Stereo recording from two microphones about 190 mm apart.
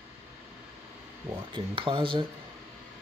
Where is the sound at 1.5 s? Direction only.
25° right (ahead or behind).